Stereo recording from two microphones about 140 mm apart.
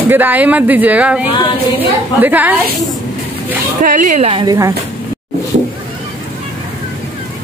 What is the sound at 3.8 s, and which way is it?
Speech, 65° right (ahead or behind).